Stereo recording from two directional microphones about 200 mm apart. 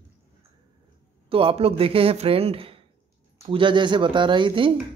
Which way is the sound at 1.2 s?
30° right (ahead or behind).